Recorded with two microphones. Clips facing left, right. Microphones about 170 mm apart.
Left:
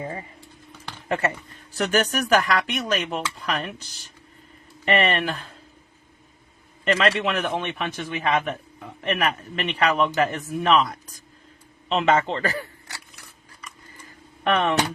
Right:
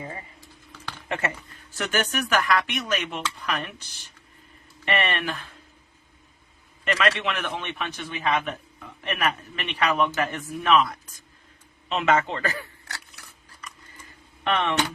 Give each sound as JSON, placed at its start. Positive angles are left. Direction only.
{"t": 1.0, "sound": "speech", "side_deg": 35}
{"t": 4.9, "sound": "speech", "side_deg": 40}
{"t": 6.8, "sound": "a man's voice", "side_deg": 35}
{"t": 14.5, "sound": "speech", "side_deg": 40}